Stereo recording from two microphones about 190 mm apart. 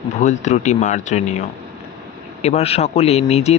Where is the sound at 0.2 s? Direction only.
40° left (ahead or behind).